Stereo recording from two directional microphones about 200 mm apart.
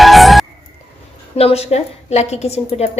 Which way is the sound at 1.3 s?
30° left (ahead or behind).